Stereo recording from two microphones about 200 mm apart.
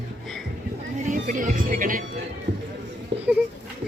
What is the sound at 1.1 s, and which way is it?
Music, 40° right (ahead or behind).